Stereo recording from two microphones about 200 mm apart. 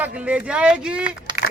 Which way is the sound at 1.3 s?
20° right (ahead or behind).